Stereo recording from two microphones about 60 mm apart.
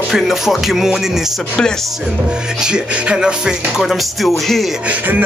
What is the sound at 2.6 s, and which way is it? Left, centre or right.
Music, centre.